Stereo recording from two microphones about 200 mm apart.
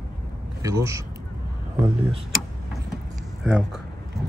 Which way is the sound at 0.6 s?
15° right (ahead or behind).